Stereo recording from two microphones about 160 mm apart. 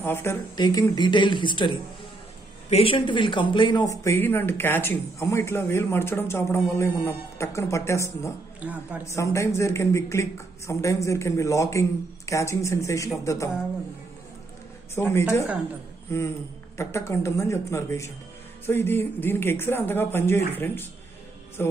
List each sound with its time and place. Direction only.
0.0 s speech: 15° left (ahead or behind); by 3.8 s 30° left (ahead or behind)
3.9 s speech: 20° left (ahead or behind)
8.5 s speech: 10° right (ahead or behind)
9.0 s speech: 20° left (ahead or behind)
15.0 s speech: 15° left (ahead or behind)